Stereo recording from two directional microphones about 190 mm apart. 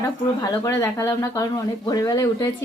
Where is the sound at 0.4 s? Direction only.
15° left (ahead or behind).